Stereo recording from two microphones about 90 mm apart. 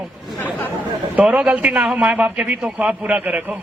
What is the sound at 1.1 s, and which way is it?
A man's voice, 15° right (ahead or behind).